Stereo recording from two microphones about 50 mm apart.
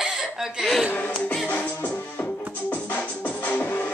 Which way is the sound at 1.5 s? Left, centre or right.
Left.